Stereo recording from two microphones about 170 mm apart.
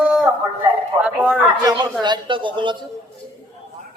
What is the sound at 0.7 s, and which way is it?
Music, 5° right (ahead or behind).